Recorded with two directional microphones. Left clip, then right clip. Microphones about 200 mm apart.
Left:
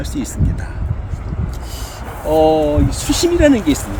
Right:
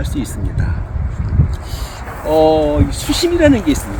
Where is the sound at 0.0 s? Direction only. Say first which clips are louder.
Right 1 dB; 15° left (ahead or behind).